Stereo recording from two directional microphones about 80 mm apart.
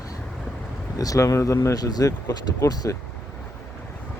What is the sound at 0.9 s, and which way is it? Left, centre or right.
Speech, left.